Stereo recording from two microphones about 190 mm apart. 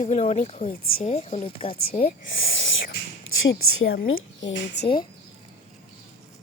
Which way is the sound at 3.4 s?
90° left.